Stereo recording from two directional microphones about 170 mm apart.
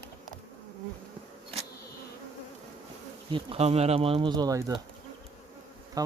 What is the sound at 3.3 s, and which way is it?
Speech, 35° right (ahead or behind).